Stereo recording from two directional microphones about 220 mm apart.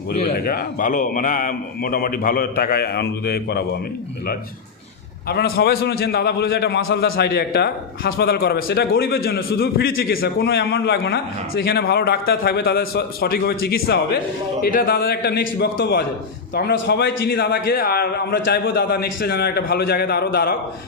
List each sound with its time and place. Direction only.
0.3 s a man's voice: 40° left (ahead or behind)
5.3 s a man's voice: 45° left (ahead or behind)